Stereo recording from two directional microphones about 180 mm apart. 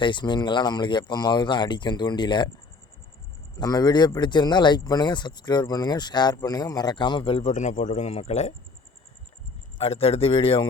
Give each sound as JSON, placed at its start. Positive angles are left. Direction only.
{"t": 0.0, "sound": "speech", "side_deg": 25}
{"t": 3.6, "sound": "speech", "side_deg": 20}
{"t": 9.7, "sound": "speech", "side_deg": 35}